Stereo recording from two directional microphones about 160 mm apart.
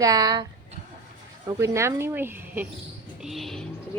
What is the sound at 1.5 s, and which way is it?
Speech, 20° right (ahead or behind).